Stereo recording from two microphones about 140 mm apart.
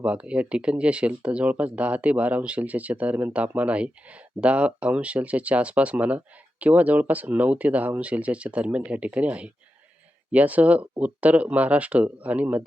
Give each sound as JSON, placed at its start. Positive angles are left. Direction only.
{"t": 0.0, "sound": "speech", "side_deg": -10}